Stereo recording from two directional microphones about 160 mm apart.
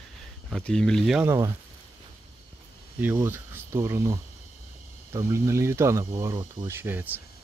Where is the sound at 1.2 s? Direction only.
20° right (ahead or behind).